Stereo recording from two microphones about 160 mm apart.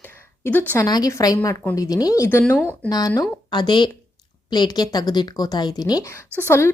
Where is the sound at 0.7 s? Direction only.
20° left (ahead or behind).